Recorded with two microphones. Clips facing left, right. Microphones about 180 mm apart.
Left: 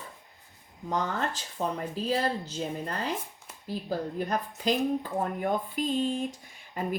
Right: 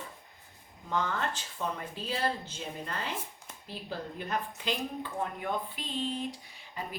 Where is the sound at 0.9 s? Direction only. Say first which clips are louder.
Left 2 dB; 40° left (ahead or behind).